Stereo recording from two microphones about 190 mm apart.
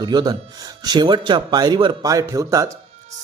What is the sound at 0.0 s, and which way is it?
A man's voice, 20° right (ahead or behind).